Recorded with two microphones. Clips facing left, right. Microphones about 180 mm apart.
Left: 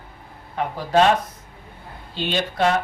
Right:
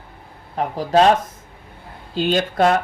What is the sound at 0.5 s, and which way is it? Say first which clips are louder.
Speech: right 2 dB; 35° right (ahead or behind).